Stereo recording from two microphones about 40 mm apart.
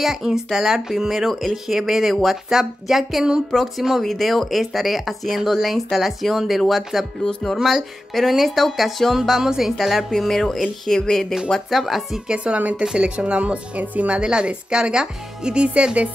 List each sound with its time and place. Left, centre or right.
0.0 s speech: centre
11.7 s speech: centre
12.5 s speech: right
12.9 s speech: right